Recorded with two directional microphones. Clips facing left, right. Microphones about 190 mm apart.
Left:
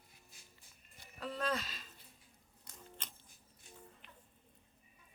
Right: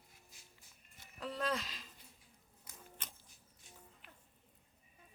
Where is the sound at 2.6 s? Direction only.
10° right (ahead or behind).